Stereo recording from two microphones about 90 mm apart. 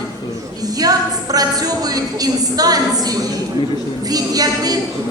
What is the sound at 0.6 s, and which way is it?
Speech, 45° right (ahead or behind).